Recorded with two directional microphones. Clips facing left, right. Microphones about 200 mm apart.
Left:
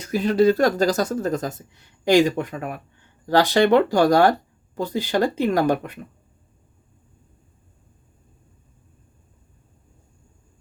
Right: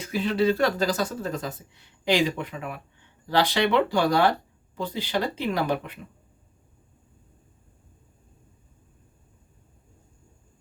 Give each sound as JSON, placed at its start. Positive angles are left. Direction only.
{"t": 0.0, "sound": "speech", "side_deg": 40}